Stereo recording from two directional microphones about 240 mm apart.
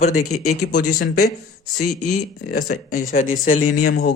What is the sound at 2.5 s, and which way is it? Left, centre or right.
Speech, left.